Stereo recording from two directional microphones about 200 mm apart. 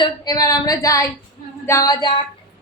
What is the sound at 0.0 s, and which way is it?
A woman's voice, 20° left (ahead or behind).